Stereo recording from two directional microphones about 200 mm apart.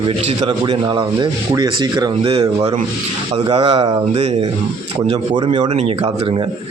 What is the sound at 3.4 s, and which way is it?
A man's voice, 30° right (ahead or behind).